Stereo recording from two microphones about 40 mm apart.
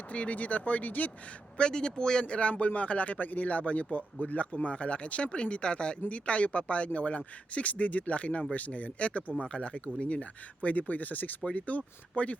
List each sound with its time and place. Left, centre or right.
0.1 s a man's voice: left
1.5 s a man's voice: left